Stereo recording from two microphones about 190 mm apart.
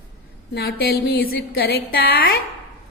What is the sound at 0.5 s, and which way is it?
Speech, 55° left (ahead or behind).